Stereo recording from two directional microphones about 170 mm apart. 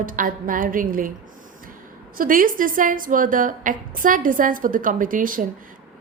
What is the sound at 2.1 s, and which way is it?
A woman's voice, 55° right (ahead or behind).